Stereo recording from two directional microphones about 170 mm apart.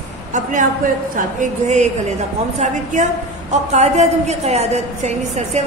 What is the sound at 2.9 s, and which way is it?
A woman's voice, 45° right (ahead or behind).